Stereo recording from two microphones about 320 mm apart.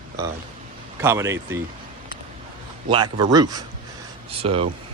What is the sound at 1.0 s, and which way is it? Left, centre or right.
Speech, centre.